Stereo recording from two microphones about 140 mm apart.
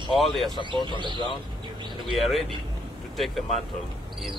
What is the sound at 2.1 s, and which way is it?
Speech, centre (ahead or behind).